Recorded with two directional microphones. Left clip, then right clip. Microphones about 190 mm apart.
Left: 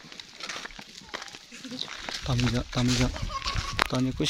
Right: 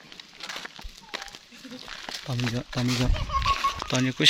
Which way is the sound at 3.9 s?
5° left (ahead or behind).